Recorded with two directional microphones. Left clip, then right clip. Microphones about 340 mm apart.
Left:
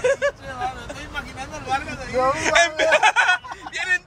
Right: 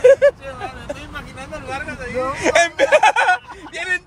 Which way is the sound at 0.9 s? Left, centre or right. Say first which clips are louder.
Right 5 dB; right.